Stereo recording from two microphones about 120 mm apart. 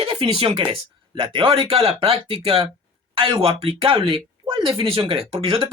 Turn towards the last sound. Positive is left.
turn(degrees=-50)  # may be behind; listen again after turning